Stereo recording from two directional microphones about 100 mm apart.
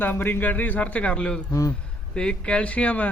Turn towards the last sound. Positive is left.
turn(degrees=15)  # may be behind; listen again after turning